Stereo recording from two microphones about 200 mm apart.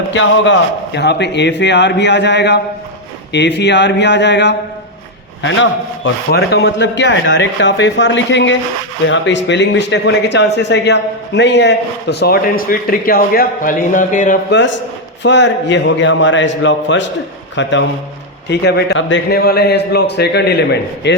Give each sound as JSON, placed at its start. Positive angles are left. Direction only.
{"t": 0.1, "sound": "a man's voice", "side_deg": 65}
{"t": 14.5, "sound": "a man's voice", "side_deg": 65}